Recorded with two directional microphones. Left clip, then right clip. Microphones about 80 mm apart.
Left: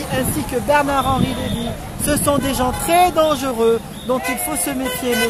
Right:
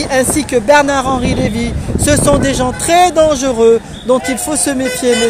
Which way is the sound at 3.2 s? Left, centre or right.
Right.